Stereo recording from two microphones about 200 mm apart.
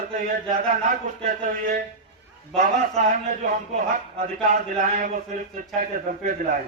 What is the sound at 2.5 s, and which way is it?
Speech, 35° right (ahead or behind).